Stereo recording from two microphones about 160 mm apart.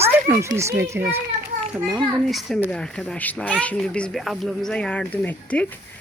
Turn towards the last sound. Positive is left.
turn(degrees=10)  # may be behind; listen again after turning